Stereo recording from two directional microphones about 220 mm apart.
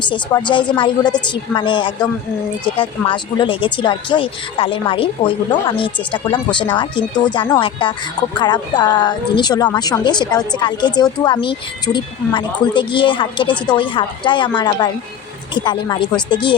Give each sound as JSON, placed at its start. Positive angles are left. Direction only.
{"t": 0.0, "sound": "speech", "side_deg": 20}
{"t": 3.1, "sound": "speech", "side_deg": 20}